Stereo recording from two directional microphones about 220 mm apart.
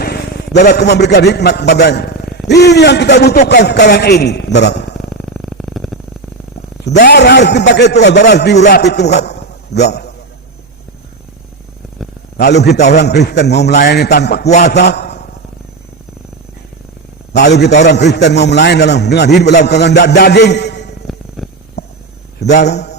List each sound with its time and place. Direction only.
0.0 s a man's voice: 45° left (ahead or behind)
4.9 s purr: centre (ahead or behind)
6.8 s a man's voice: 50° left (ahead or behind)
12.4 s a man's voice: 50° left (ahead or behind)
17.3 s a man's voice: 50° left (ahead or behind)
21.1 s purr: centre (ahead or behind)
21.8 s a sound: 50° left (ahead or behind)
22.4 s a man's voice: 50° left (ahead or behind)